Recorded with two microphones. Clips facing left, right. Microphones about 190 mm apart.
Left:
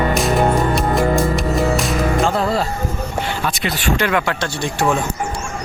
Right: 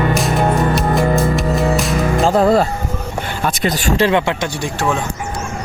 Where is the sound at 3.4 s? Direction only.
40° right (ahead or behind).